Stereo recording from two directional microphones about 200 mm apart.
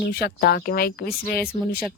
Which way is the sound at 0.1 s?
50° left (ahead or behind).